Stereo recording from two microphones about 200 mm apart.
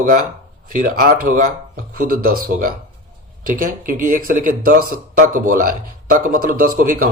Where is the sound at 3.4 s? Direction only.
45° right (ahead or behind).